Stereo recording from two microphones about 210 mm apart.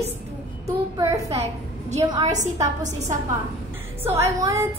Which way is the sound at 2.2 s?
35° right (ahead or behind).